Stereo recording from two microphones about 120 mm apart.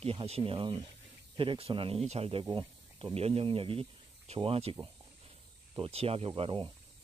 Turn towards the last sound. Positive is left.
turn(degrees=-45)  # may be behind; listen again after turning